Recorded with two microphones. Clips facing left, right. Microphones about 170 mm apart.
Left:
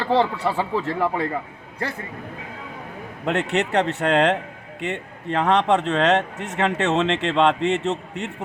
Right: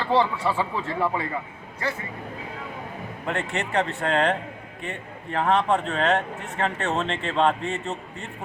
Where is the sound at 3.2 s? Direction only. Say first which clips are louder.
Left 6 dB; 70° left (ahead or behind).